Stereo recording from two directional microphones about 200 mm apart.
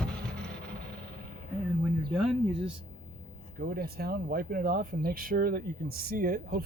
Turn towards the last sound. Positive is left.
turn(degrees=-45)  # may be behind; listen again after turning